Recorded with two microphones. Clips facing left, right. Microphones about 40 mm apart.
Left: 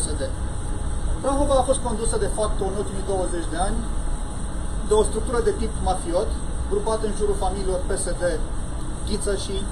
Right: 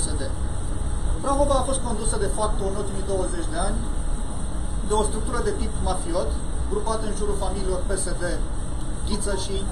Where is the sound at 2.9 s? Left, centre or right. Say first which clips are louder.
Left 2 dB; left.